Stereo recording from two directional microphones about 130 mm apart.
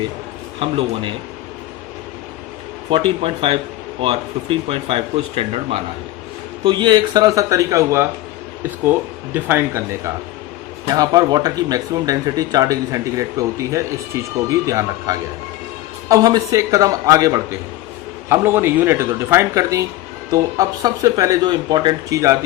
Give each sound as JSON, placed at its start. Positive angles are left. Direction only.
{"t": 0.6, "sound": "speech", "side_deg": -40}
{"t": 2.9, "sound": "speech", "side_deg": -45}
{"t": 6.7, "sound": "speech", "side_deg": -35}
{"t": 9.3, "sound": "speech", "side_deg": -15}
{"t": 10.8, "sound": "speech", "side_deg": -30}